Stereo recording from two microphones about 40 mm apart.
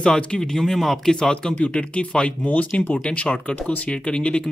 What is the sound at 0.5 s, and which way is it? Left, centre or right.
Speech, centre.